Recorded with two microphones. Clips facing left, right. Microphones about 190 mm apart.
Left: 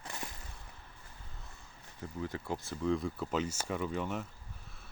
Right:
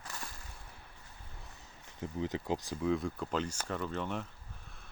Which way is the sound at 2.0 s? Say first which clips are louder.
Right 3 dB; 20° right (ahead or behind).